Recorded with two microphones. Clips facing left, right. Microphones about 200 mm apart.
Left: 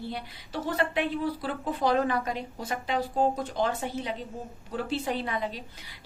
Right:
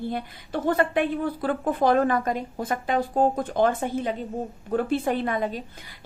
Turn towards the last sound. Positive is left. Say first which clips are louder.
# right 6 dB
turn(degrees=-50)  # may be behind; listen again after turning